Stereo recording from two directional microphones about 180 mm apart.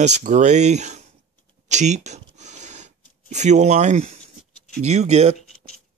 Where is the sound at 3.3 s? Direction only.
40° right (ahead or behind).